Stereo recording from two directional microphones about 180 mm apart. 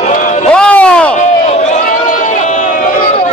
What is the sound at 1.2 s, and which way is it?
Run, 40° left (ahead or behind).